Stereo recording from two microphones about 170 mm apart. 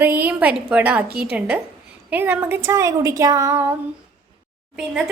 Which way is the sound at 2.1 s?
10° right (ahead or behind).